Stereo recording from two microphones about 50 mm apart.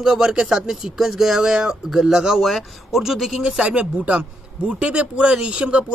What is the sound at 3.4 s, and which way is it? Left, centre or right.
A woman's voice, right.